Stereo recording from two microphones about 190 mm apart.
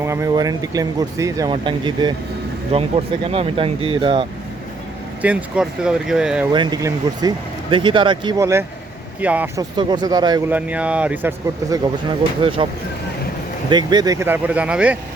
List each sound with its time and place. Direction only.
0.0 s speech: 15° right (ahead or behind)
5.2 s speech: 5° right (ahead or behind)
6.5 s speech: 20° right (ahead or behind)
9.6 s speech: 20° right (ahead or behind)
10.5 s speech: 5° right (ahead or behind)
12.4 s speech: 25° right (ahead or behind)
13.7 s speech: 20° right (ahead or behind); by 14.9 s 5° right (ahead or behind)